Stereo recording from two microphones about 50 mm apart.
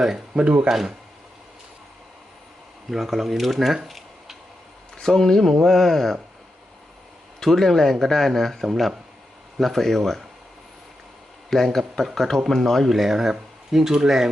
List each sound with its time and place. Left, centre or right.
0.0 s speech: centre
0.7 s speech: centre
2.9 s speech: centre
3.8 s tick-tock: centre
4.9 s speech: centre
7.3 s speech: centre
11.5 s speech: centre